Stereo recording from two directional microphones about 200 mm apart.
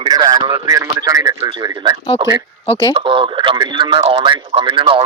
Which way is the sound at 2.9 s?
25° right (ahead or behind).